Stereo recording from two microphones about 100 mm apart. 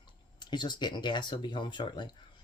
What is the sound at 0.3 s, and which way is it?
Speech, 45° left (ahead or behind).